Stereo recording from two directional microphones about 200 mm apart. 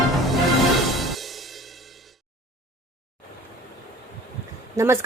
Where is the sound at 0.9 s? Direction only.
Centre (ahead or behind).